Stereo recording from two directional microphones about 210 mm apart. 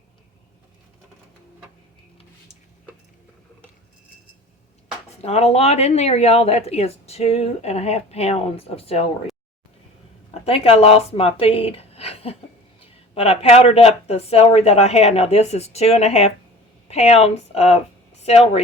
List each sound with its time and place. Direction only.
5.1 s a woman's voice: 30° left (ahead or behind)
10.4 s a woman's voice: 30° left (ahead or behind)